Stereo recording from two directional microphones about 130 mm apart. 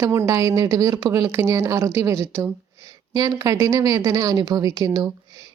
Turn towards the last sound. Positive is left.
turn(degrees=-30)  # may be behind; listen again after turning